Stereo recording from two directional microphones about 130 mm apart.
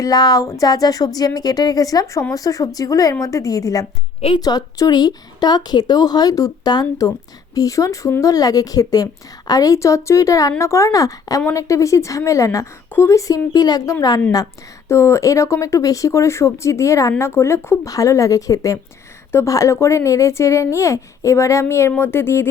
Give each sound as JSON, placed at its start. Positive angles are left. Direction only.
{"t": 0.0, "sound": "a woman's voice", "side_deg": 30}